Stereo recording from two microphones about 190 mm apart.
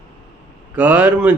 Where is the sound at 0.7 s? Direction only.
10° right (ahead or behind).